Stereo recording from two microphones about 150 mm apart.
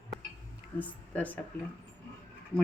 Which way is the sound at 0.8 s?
10° left (ahead or behind).